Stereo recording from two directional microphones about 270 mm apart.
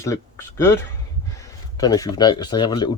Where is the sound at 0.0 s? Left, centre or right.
Centre.